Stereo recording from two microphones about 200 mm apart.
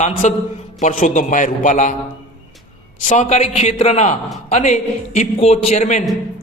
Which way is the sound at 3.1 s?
35° left (ahead or behind).